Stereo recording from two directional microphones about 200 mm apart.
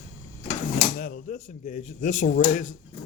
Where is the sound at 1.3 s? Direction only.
40° left (ahead or behind).